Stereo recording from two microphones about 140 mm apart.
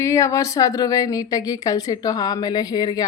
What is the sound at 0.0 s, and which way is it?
A woman's voice, 20° left (ahead or behind).